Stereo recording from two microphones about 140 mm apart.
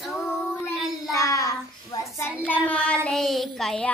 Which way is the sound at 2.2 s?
10° left (ahead or behind).